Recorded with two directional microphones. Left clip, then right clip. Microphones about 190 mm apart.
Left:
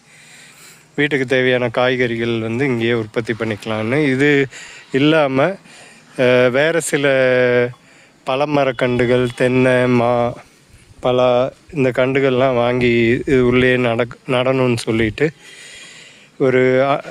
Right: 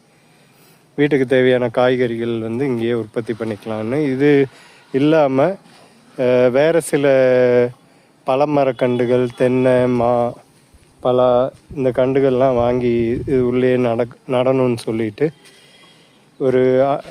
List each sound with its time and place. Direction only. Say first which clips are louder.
0.9 s speech: right 1 dB; centre (ahead or behind)
16.4 s speech: left 1 dB; 20° left (ahead or behind)